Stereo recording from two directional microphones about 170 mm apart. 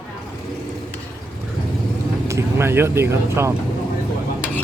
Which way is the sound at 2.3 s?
15° right (ahead or behind).